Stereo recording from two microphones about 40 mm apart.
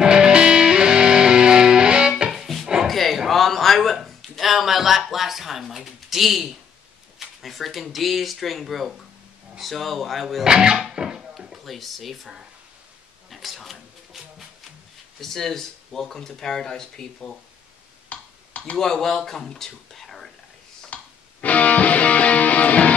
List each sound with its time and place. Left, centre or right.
0.0 s music: centre
2.3 s music: centre
2.9 s a sound: centre
3.3 s speech: centre
10.4 s speech: centre
10.9 s dishes: centre
13.3 s a sound: centre
15.1 s speech: centre
18.1 s a sound: left
18.8 s speech: centre
20.9 s music: left